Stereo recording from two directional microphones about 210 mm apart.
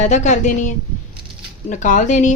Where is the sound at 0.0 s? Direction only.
35° left (ahead or behind).